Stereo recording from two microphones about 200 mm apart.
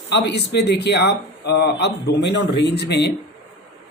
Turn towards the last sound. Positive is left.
turn(degrees=55)  # may be behind; listen again after turning